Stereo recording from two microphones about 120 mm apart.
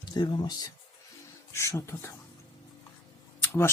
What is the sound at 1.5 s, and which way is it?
Speech, 25° left (ahead or behind).